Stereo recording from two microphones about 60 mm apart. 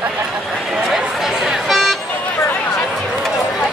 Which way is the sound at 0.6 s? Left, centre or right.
Centre.